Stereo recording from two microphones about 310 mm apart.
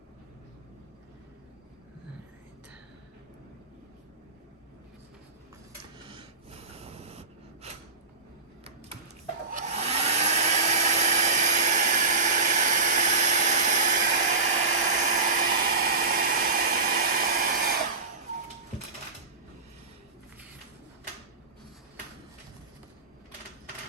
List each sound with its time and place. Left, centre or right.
6.1 s snort: centre
9.5 s hair dryer: right
14.8 s a sound: right